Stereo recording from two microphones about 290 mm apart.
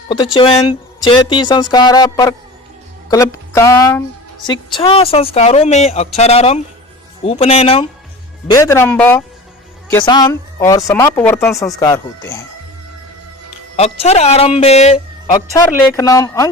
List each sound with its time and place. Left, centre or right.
0.3 s a woman's voice: centre
13.7 s a woman's voice: left
16.0 s speech: centre